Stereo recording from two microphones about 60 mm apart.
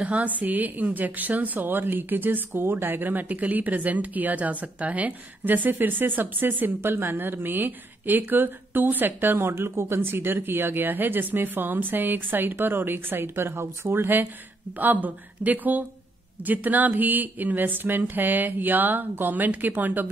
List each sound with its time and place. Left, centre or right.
0.0 s a woman's voice: right